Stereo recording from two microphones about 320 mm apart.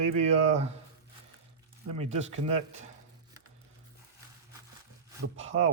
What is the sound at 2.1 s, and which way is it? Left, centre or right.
Speech, centre.